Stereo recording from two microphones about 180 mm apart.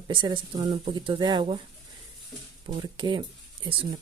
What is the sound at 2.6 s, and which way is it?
Speech, 25° right (ahead or behind).